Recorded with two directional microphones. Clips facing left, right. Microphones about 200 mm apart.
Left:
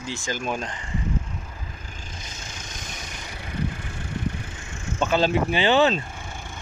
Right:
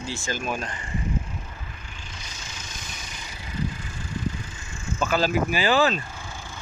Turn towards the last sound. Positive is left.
turn(degrees=25)  # may be behind; listen again after turning